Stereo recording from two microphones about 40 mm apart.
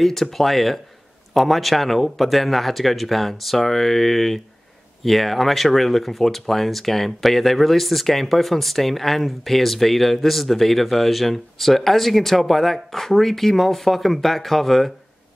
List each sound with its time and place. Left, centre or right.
0.0 s speech: centre